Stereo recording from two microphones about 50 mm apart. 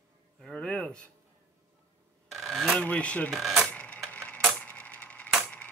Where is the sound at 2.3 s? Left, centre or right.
Centre.